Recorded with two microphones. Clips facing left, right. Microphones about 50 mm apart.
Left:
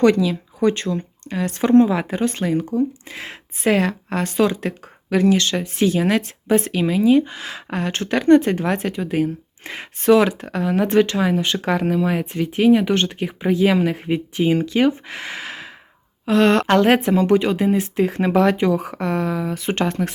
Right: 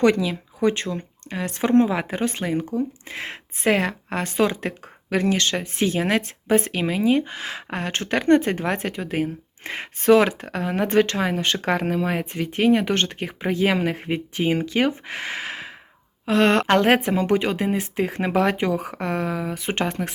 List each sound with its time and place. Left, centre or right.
0.0 s speech: right